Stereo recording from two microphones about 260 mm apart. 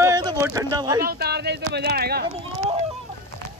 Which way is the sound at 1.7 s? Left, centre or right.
Right.